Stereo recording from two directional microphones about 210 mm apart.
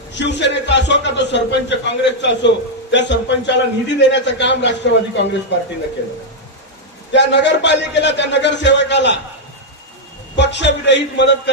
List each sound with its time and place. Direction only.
0.1 s a man's voice: 55° left (ahead or behind)
7.1 s a man's voice: 55° left (ahead or behind)
10.3 s a man's voice: 55° left (ahead or behind)